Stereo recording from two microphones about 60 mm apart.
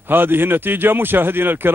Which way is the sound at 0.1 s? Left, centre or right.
Right.